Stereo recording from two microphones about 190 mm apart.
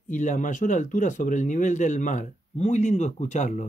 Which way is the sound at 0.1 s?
40° left (ahead or behind).